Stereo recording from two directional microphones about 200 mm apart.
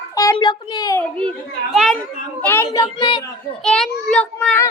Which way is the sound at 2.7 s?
25° left (ahead or behind).